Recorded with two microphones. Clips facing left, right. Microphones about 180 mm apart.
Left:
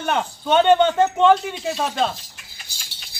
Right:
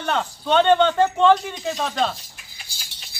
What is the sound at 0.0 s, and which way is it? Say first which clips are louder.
A man's voice: left 1 dB; 10° left (ahead or behind).